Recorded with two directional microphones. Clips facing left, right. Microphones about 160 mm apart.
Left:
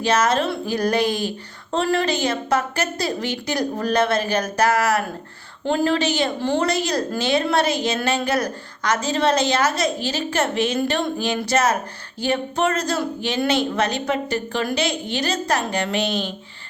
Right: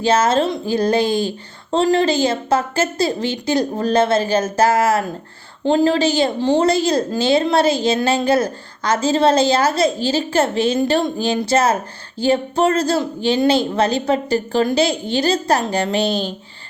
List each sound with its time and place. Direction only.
0.0 s a woman's voice: 30° right (ahead or behind)